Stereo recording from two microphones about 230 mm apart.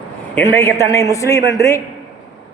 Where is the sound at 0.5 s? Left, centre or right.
Centre.